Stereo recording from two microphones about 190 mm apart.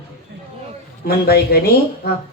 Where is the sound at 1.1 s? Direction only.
55° left (ahead or behind).